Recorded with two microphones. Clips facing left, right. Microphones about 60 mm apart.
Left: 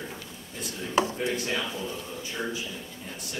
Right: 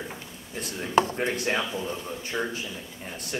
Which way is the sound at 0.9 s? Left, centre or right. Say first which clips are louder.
Right 3 dB; right.